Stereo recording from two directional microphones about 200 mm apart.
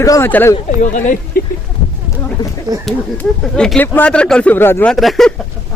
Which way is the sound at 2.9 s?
5° left (ahead or behind).